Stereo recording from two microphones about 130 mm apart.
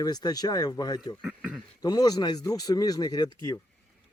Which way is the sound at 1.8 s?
30° left (ahead or behind).